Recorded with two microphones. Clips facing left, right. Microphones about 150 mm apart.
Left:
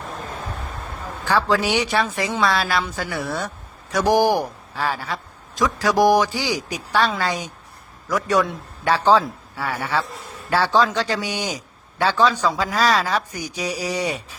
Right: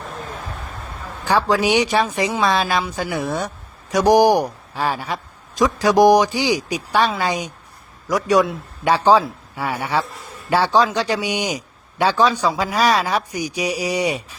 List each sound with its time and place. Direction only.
1.2 s a man's voice: 15° right (ahead or behind)